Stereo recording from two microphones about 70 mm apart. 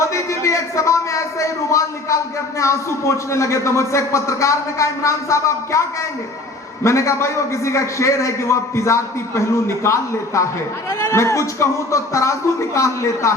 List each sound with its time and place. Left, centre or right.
0.0 s a man's voice: left
6.8 s a man's voice: left